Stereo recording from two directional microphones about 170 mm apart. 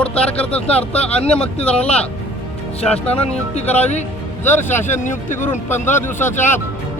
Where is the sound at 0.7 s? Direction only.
35° left (ahead or behind).